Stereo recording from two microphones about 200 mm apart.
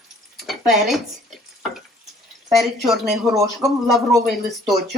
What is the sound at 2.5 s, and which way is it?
Dishes, centre (ahead or behind).